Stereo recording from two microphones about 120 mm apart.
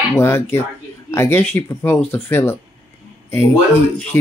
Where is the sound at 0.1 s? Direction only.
20° left (ahead or behind).